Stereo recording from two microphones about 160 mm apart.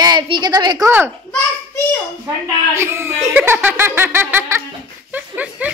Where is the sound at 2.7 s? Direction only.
15° right (ahead or behind).